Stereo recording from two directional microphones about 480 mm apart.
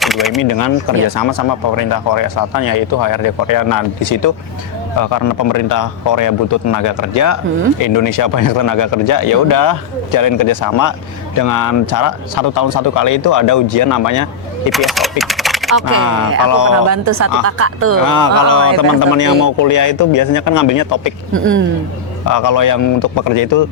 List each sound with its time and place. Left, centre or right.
0.0 s speech: centre
0.4 s speech: left
14.7 s speech: centre
16.5 s speech: left
16.9 s speech: right
18.0 s speech: left
21.3 s speech: right
22.3 s speech: left